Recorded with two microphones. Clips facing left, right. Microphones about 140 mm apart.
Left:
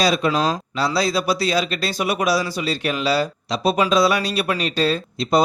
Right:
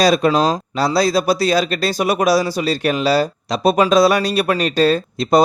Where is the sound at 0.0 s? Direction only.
45° right (ahead or behind).